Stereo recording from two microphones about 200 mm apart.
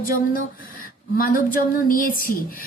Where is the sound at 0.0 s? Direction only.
45° left (ahead or behind).